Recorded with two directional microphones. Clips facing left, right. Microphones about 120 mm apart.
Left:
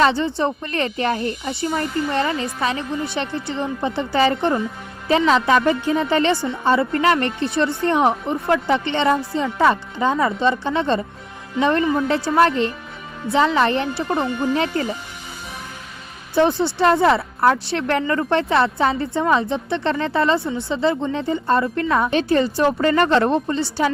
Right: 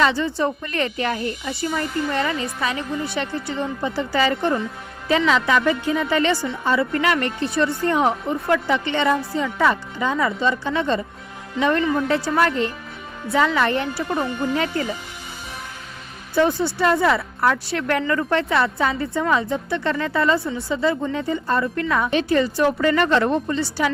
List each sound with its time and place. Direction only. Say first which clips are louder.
0.0 s speech: left 2 dB; 30° left (ahead or behind)
16.6 s speech: left 3 dB; 25° left (ahead or behind)